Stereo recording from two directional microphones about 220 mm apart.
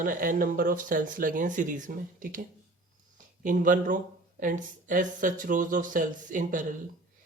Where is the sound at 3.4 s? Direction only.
35° right (ahead or behind).